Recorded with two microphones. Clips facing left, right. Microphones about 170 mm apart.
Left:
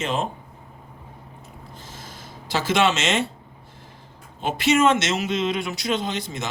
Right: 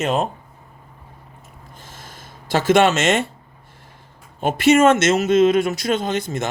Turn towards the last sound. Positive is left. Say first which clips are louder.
# right 5 dB
turn(degrees=-50)  # may be behind; listen again after turning